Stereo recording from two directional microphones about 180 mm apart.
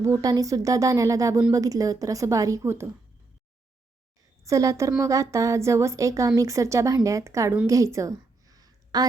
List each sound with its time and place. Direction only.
0.0 s a woman's voice: 20° right (ahead or behind)
4.4 s a woman's voice: 20° right (ahead or behind)
7.7 s a sound: 15° right (ahead or behind)